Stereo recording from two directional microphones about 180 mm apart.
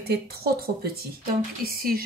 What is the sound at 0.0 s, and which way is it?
A woman's voice, 60° right (ahead or behind).